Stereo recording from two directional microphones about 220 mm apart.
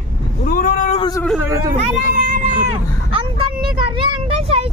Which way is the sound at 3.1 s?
25° right (ahead or behind).